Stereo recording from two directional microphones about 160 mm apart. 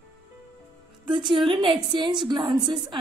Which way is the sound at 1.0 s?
30° right (ahead or behind).